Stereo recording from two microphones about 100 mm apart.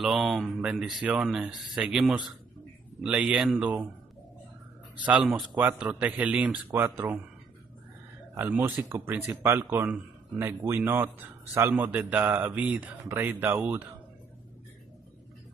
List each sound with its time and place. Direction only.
0.0 s a man's voice: centre (ahead or behind)
3.6 s a man's voice: 15° right (ahead or behind)
5.6 s a man's voice: 15° right (ahead or behind)
8.4 s a man's voice: 25° right (ahead or behind)